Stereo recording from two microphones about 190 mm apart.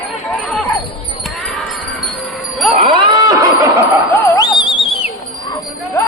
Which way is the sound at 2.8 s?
25° right (ahead or behind).